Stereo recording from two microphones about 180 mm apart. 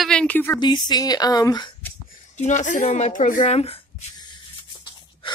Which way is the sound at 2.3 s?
40° left (ahead or behind).